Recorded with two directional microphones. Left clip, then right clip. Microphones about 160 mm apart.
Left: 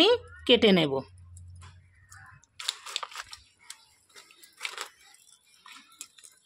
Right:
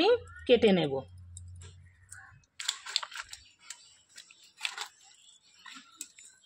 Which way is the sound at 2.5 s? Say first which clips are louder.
Even; 10° left (ahead or behind).